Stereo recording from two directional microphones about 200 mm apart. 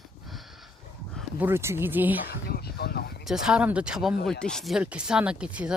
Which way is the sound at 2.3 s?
50° left (ahead or behind).